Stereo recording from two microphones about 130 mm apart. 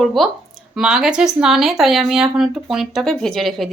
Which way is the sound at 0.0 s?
Centre (ahead or behind).